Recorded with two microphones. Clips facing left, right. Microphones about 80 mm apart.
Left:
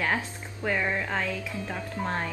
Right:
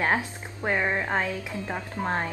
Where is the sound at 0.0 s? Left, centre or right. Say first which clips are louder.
Right 3 dB; right.